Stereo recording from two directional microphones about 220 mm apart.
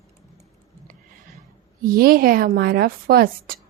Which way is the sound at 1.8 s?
40° right (ahead or behind).